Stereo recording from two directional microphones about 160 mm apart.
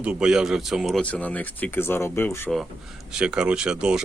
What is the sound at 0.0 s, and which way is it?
Speech, 5° right (ahead or behind).